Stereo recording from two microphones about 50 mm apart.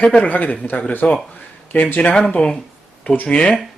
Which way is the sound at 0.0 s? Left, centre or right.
Left.